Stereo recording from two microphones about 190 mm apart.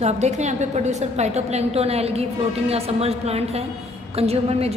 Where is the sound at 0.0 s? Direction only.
35° right (ahead or behind).